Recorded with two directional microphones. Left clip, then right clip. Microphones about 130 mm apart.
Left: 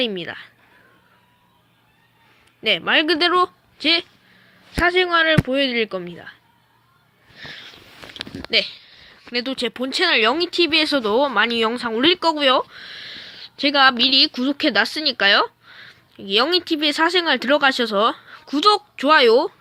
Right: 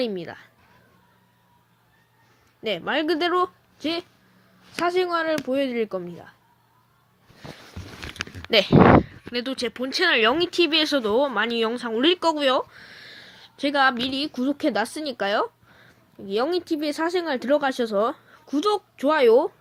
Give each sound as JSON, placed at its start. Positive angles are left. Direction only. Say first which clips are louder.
{"t": 0.0, "sound": "speech", "louder": "left 4 dB", "side_deg": 10}
{"t": 2.6, "sound": "speech", "louder": "left 7 dB", "side_deg": 20}
{"t": 4.8, "sound": "speech", "louder": "left 6 dB", "side_deg": 5}
{"t": 8.5, "sound": "speech", "louder": "even", "side_deg": -75}
{"t": 9.6, "sound": "speech", "louder": "left 4 dB", "side_deg": 55}
{"t": 10.0, "sound": "speech", "louder": "left 2 dB", "side_deg": 10}
{"t": 10.7, "sound": "speech", "louder": "left 3 dB", "side_deg": 20}
{"t": 12.7, "sound": "a sound", "louder": "left 8 dB", "side_deg": 35}
{"t": 13.3, "sound": "a woman's voice", "louder": "left 5 dB", "side_deg": 15}
{"t": 15.8, "sound": "a sound", "louder": "left 4 dB", "side_deg": 30}
{"t": 16.7, "sound": "speech", "louder": "left 7 dB", "side_deg": 30}
{"t": 17.9, "sound": "speech", "louder": "left 5 dB", "side_deg": 35}
{"t": 18.3, "sound": "a woman's voice", "louder": "left 7 dB", "side_deg": 15}